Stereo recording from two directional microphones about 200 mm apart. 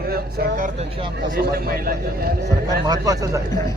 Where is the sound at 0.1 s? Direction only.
45° right (ahead or behind).